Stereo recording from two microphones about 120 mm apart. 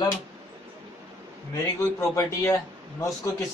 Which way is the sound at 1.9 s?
25° left (ahead or behind).